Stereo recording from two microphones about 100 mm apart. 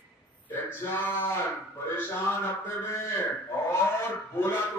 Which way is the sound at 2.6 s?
25° left (ahead or behind).